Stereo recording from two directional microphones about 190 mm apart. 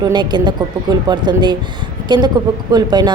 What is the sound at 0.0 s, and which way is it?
Speech, 25° right (ahead or behind).